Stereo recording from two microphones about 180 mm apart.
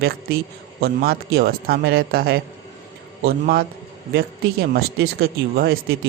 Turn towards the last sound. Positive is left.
turn(degrees=-55)  # may be behind; listen again after turning